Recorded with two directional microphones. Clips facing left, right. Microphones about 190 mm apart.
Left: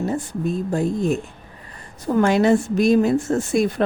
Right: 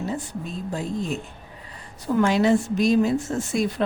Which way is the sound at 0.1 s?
50° left (ahead or behind).